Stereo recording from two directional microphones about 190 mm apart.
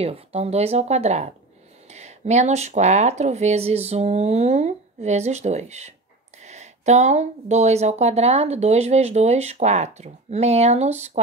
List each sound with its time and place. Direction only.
0.0 s speech: 30° right (ahead or behind)